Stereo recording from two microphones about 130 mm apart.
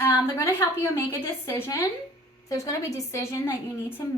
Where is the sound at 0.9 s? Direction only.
20° left (ahead or behind).